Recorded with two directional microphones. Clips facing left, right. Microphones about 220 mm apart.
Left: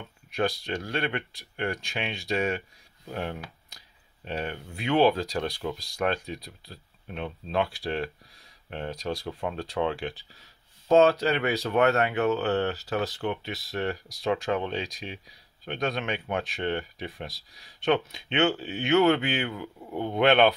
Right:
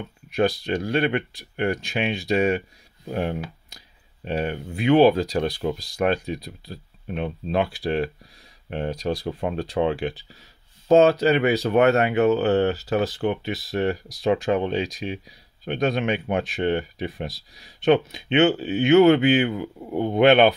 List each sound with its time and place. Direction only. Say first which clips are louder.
0.4 s speech: right 6 dB; 5° right (ahead or behind)
5.3 s speech: right 6 dB; 20° right (ahead or behind)
6.0 s speech: right 6 dB; 5° right (ahead or behind)